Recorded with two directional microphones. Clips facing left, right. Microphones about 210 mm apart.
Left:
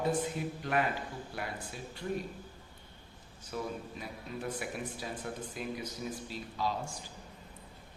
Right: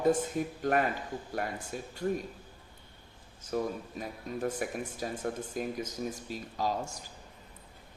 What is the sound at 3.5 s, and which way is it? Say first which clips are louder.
Speech: right 5 dB; 45° right (ahead or behind).